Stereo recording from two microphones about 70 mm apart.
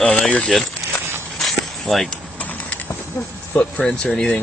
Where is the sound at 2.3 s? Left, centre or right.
Left.